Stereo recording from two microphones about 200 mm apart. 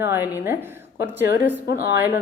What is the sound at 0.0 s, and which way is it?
A woman's voice, 10° right (ahead or behind).